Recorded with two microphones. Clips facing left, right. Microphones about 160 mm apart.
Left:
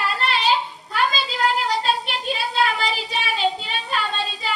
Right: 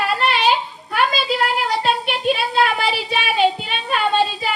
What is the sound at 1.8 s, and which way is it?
Child singing, 60° right (ahead or behind).